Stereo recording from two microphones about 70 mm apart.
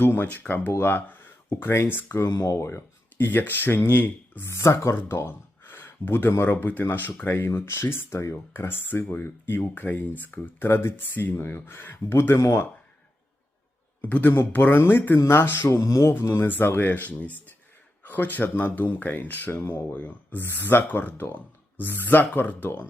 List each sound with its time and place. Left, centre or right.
0.0 s speech: left
2.6 s speech: left
4.4 s speech: left
14.0 s speech: left
16.1 s speech: left